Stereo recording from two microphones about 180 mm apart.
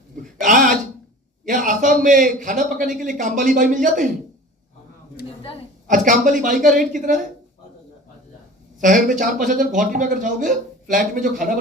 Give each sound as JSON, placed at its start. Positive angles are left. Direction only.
{"t": 0.3, "sound": "a sound", "side_deg": -45}
{"t": 1.5, "sound": "a man's voice", "side_deg": -45}
{"t": 5.9, "sound": "a man's voice", "side_deg": -45}
{"t": 8.8, "sound": "a man's voice", "side_deg": -45}